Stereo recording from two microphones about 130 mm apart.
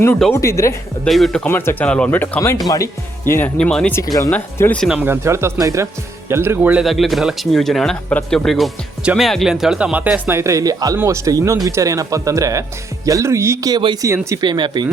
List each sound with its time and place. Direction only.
0.3 s speech: 25° left (ahead or behind)
1.0 s speech: centre (ahead or behind)
1.5 s speech: 15° left (ahead or behind)
3.6 s speech: 5° left (ahead or behind)
3.9 s speech: 25° left (ahead or behind)
4.3 s speech: 15° left (ahead or behind)
4.9 s speech: 15° right (ahead or behind)
6.8 s speech: centre (ahead or behind); by 14.8 s 35° right (ahead or behind)